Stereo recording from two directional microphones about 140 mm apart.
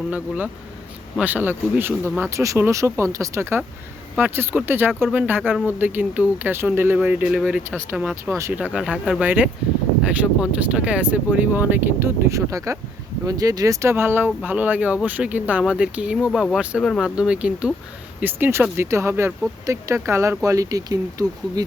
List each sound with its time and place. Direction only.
0.1 s speech: 10° right (ahead or behind)
8.4 s speech: 15° right (ahead or behind)